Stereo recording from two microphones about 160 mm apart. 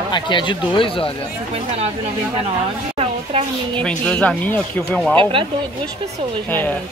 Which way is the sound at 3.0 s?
40° right (ahead or behind).